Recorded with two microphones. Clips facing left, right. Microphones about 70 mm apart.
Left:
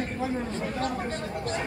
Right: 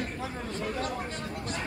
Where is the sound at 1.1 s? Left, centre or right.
Left.